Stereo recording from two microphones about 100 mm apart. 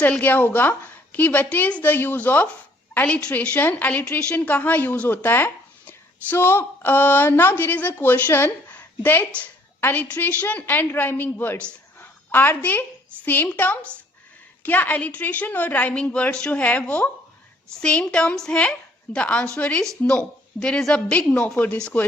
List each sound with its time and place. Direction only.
0.0 s a woman's voice: 15° left (ahead or behind)
11.9 s a sound: 20° left (ahead or behind)
13.2 s a woman's voice: 20° left (ahead or behind)